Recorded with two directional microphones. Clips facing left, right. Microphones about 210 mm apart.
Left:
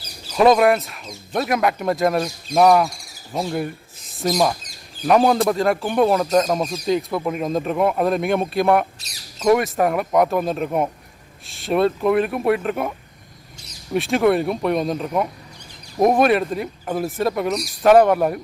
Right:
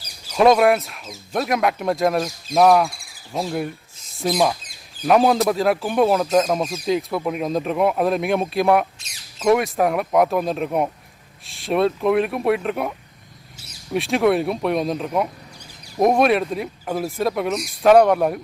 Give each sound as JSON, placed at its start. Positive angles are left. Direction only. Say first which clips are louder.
{"t": 0.3, "sound": "speech", "louder": "even", "side_deg": 0}
{"t": 9.0, "sound": "speech", "louder": "left 3 dB", "side_deg": 35}
{"t": 9.4, "sound": "speech", "louder": "left 1 dB", "side_deg": 0}